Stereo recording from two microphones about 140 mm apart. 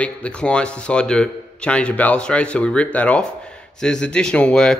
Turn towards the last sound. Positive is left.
turn(degrees=5)  # may be behind; listen again after turning